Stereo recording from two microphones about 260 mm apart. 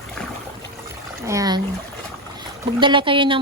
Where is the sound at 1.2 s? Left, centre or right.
Centre.